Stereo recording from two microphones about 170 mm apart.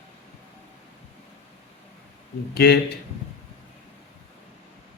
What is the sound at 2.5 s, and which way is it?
Speech, 70° left (ahead or behind).